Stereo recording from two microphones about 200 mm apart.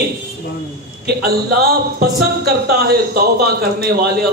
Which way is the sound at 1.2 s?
50° right (ahead or behind).